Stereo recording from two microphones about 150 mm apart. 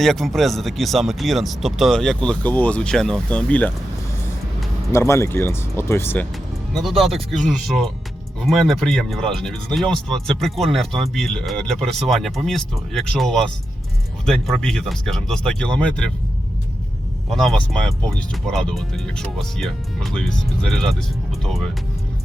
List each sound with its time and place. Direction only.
0.0 s speech: centre (ahead or behind)
4.9 s speech: 20° left (ahead or behind)
6.7 s speech: centre (ahead or behind)
17.2 s speech: centre (ahead or behind)